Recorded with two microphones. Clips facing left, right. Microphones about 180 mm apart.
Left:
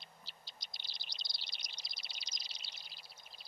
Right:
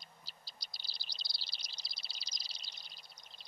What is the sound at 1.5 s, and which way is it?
Chirp, 30° right (ahead or behind).